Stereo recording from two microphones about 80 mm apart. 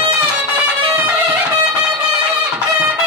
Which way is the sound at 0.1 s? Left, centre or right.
Centre.